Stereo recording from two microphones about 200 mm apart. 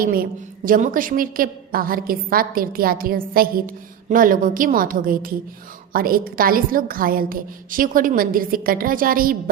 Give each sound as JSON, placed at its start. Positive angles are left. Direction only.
{"t": 0.0, "sound": "a woman's voice", "side_deg": -45}